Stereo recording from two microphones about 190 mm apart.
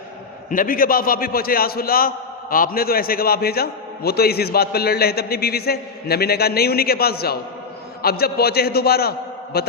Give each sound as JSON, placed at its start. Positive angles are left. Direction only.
{"t": 0.5, "sound": "a man's voice", "side_deg": 45}